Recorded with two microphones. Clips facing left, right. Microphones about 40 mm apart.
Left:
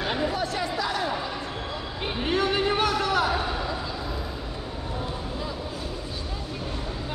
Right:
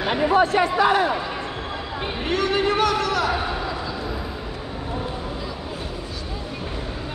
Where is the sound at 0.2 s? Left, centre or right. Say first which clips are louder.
Right 9 dB; right.